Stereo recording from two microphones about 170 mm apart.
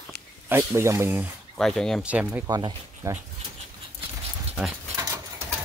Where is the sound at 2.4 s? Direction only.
20° right (ahead or behind).